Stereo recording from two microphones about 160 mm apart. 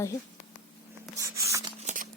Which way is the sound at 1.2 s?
20° right (ahead or behind).